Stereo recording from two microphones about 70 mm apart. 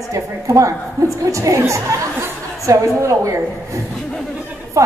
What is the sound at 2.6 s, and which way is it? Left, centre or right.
A woman's voice, right.